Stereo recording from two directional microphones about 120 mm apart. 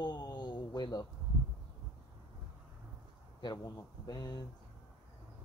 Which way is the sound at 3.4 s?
35° left (ahead or behind).